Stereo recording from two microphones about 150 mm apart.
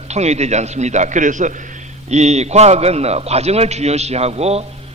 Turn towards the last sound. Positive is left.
turn(degrees=-45)  # may be behind; listen again after turning